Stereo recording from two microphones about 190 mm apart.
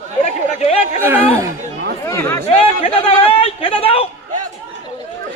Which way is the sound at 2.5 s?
30° left (ahead or behind).